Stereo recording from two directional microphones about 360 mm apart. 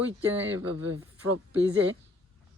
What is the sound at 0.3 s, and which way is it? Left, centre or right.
Speech, right.